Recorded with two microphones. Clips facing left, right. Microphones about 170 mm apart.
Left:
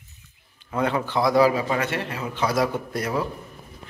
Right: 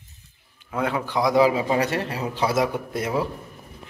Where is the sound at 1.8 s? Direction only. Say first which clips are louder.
Right 3 dB; 35° right (ahead or behind).